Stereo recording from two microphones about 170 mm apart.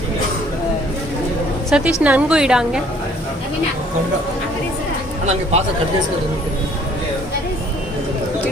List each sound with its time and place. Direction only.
1.7 s a woman's voice: 5° right (ahead or behind)
5.2 s speech: 40° right (ahead or behind)